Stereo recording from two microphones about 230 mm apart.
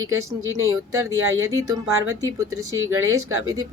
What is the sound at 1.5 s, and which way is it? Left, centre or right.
Speech, centre.